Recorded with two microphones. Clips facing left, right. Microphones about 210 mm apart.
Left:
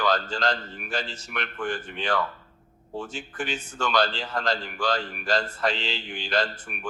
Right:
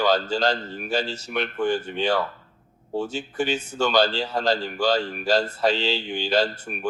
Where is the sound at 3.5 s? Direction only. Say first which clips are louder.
Right 4 dB; 40° right (ahead or behind).